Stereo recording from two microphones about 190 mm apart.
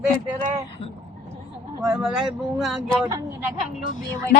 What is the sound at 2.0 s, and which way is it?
Speech, centre (ahead or behind).